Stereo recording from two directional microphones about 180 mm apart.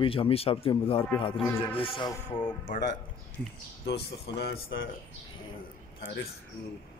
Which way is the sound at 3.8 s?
70° left (ahead or behind).